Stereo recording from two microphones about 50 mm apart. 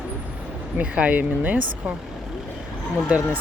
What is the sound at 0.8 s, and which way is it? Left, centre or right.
Speech, right.